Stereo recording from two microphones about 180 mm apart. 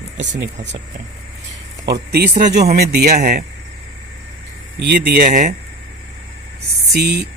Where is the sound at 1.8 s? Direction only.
65° right (ahead or behind).